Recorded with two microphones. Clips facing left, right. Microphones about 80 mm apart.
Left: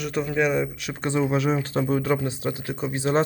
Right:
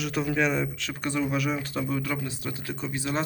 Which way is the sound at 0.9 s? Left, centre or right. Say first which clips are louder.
Left 5 dB; left.